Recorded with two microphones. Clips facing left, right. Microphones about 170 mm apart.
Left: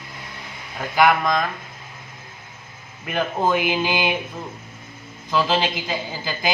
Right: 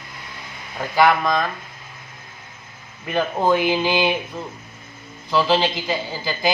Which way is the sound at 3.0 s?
15° left (ahead or behind).